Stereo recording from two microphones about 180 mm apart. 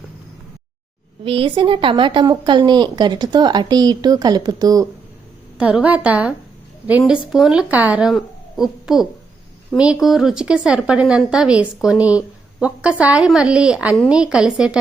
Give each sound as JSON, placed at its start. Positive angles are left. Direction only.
{"t": 1.2, "sound": "a woman's voice", "side_deg": -30}
{"t": 5.5, "sound": "a woman's voice", "side_deg": -5}